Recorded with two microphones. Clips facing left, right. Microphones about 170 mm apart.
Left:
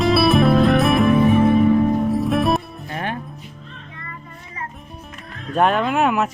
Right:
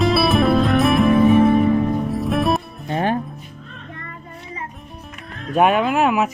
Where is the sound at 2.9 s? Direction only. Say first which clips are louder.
Right 7 dB; 30° right (ahead or behind).